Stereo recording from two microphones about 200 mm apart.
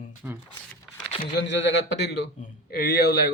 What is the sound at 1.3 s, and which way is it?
Speech, 65° left (ahead or behind).